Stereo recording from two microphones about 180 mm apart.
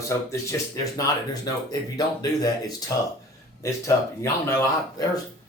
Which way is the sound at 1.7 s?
20° left (ahead or behind).